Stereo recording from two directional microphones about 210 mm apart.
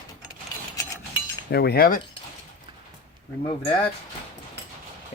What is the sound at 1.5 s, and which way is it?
Speech, 50° left (ahead or behind).